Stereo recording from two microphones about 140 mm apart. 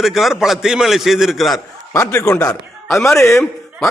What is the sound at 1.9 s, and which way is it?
A man's voice, 20° left (ahead or behind).